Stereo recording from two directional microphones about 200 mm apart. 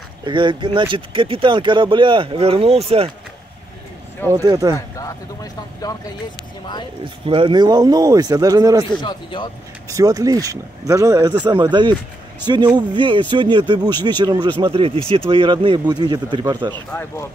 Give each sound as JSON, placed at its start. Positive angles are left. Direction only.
{"t": 0.2, "sound": "speech", "side_deg": -25}
{"t": 4.3, "sound": "speech", "side_deg": -15}
{"t": 4.7, "sound": "speech", "side_deg": 15}
{"t": 7.2, "sound": "speech", "side_deg": -25}
{"t": 9.0, "sound": "speech", "side_deg": 25}
{"t": 9.8, "sound": "speech", "side_deg": -15}
{"t": 12.4, "sound": "speech", "side_deg": -20}
{"t": 16.9, "sound": "speech", "side_deg": 10}